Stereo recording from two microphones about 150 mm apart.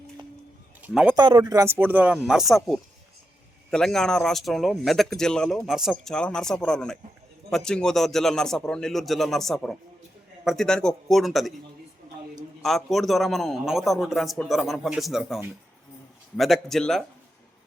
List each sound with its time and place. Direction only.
0.8 s speech: 10° right (ahead or behind)
1.1 s speech: 30° right (ahead or behind); by 11.5 s centre (ahead or behind)
12.6 s speech: centre (ahead or behind)
16.4 s speech: centre (ahead or behind)